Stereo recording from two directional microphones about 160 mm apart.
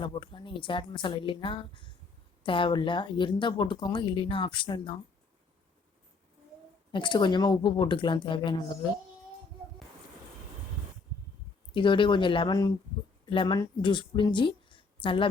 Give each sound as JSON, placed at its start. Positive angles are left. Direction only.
{"t": 0.0, "sound": "a woman's voice", "side_deg": 30}
{"t": 6.9, "sound": "speech", "side_deg": 30}
{"t": 11.7, "sound": "a woman's voice", "side_deg": 30}